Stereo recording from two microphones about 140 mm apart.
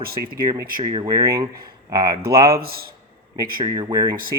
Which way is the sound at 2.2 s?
90° right.